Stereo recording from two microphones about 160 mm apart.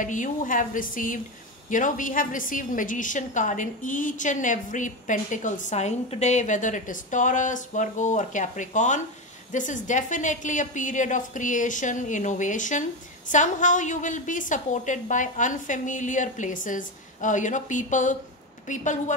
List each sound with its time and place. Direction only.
0.0 s a woman's voice: 55° left (ahead or behind)